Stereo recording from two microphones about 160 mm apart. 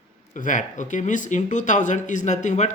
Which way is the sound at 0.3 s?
50° left (ahead or behind).